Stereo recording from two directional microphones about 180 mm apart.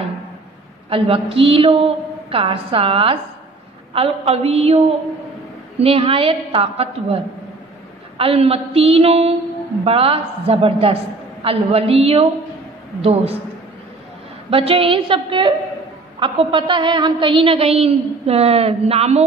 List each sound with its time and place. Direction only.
0.8 s a woman's voice: 30° right (ahead or behind)
8.2 s a woman's voice: 35° right (ahead or behind)
14.5 s a woman's voice: 30° right (ahead or behind)